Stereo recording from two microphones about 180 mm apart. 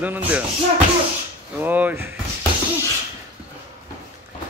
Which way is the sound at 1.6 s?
10° right (ahead or behind).